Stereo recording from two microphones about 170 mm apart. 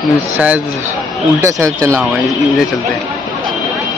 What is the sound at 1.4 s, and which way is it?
Speech, 20° right (ahead or behind).